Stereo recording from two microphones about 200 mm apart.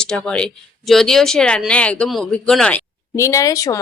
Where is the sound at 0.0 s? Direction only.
5° left (ahead or behind).